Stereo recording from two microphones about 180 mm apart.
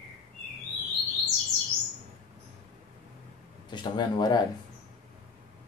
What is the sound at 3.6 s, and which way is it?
Speech, 25° left (ahead or behind).